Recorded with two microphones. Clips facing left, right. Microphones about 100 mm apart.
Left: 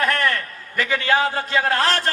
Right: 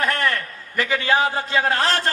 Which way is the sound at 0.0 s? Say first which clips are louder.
Left 1 dB; 20° right (ahead or behind).